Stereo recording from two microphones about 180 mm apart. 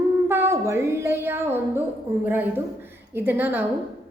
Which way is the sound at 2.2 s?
10° right (ahead or behind).